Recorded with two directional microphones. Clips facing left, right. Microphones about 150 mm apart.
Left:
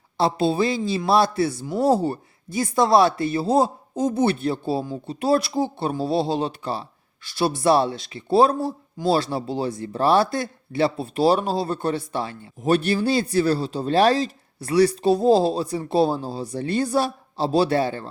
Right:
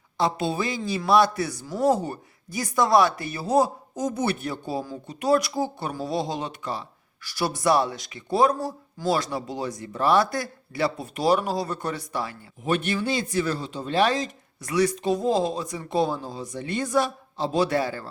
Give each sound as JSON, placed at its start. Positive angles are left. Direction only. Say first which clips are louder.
{"t": 0.2, "sound": "a man's voice", "louder": "left 5 dB", "side_deg": 30}